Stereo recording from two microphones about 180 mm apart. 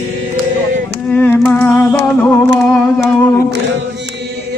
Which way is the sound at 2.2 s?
10° left (ahead or behind).